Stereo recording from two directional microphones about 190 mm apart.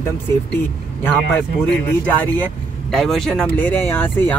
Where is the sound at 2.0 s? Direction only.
10° left (ahead or behind).